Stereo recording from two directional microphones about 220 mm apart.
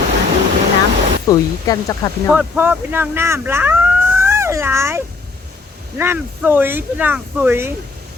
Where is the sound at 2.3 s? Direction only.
5° right (ahead or behind).